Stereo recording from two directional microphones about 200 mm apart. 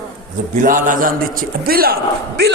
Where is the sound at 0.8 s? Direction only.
45° right (ahead or behind).